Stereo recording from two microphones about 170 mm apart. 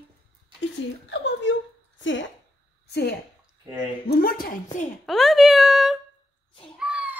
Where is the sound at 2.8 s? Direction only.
75° left (ahead or behind).